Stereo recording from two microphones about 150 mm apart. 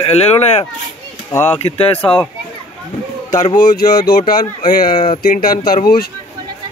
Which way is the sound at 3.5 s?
75° left (ahead or behind).